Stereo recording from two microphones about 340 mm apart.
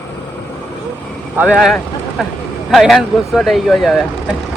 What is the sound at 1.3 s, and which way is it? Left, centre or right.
Speech, centre.